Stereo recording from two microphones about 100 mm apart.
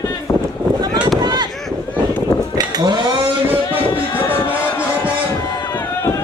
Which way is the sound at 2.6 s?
45° right (ahead or behind).